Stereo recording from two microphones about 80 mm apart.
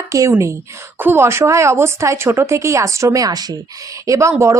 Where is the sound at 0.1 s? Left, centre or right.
Right.